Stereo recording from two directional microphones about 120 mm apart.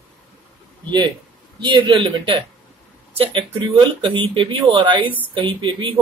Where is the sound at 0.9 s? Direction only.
40° right (ahead or behind).